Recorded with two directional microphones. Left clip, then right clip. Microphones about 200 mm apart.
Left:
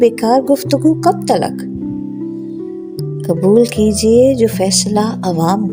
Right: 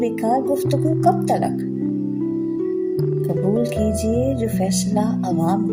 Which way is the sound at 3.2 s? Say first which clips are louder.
Left 14 dB; 55° left (ahead or behind).